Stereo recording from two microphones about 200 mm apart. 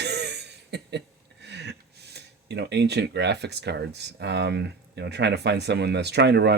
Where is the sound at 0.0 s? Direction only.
55° right (ahead or behind).